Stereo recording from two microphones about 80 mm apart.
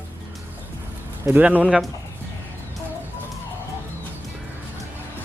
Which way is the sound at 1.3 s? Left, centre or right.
Centre.